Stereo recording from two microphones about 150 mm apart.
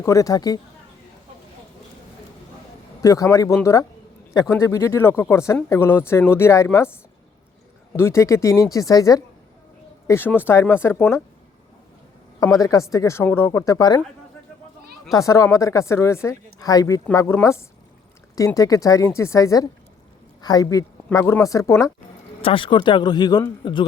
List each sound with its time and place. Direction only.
0.0 s speech: 20° left (ahead or behind)
3.0 s speech: 20° left (ahead or behind)
7.9 s speech: 20° left (ahead or behind)
12.4 s speech: 25° left (ahead or behind)
15.1 s speech: 20° left (ahead or behind)
22.4 s speech: 35° left (ahead or behind)